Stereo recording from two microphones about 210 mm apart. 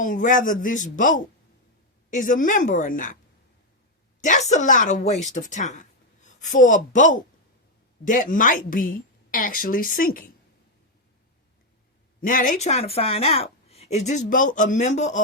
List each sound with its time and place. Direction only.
0.0 s a woman's voice: 40° left (ahead or behind)
4.3 s a woman's voice: 35° left (ahead or behind)
12.2 s a woman's voice: 40° left (ahead or behind)